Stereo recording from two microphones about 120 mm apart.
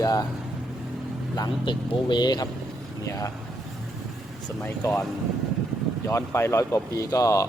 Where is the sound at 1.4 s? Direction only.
40° left (ahead or behind).